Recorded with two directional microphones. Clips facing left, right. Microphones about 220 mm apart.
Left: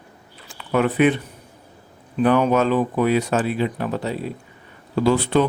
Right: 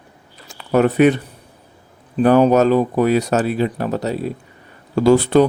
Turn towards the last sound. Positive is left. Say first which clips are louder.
# right 5 dB
turn(degrees=-45)  # may be behind; listen again after turning